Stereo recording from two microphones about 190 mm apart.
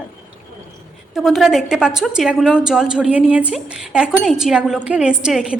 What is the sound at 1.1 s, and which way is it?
A woman's voice, centre (ahead or behind).